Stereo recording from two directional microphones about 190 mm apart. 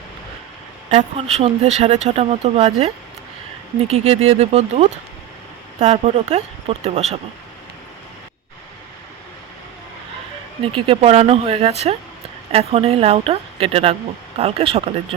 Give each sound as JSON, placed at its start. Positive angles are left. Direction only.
{"t": 0.9, "sound": "speech", "side_deg": -35}
{"t": 10.6, "sound": "speech", "side_deg": -30}